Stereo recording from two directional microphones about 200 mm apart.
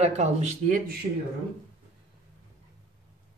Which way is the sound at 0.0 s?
35° right (ahead or behind).